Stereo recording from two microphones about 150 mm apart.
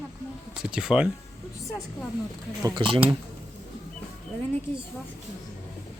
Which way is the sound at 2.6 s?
30° right (ahead or behind).